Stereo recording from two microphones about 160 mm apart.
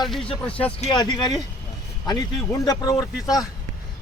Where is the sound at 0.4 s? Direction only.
10° left (ahead or behind).